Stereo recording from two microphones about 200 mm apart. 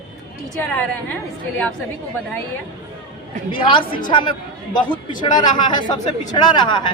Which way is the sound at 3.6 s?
25° left (ahead or behind).